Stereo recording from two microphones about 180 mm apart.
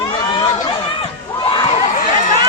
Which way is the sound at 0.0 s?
20° left (ahead or behind).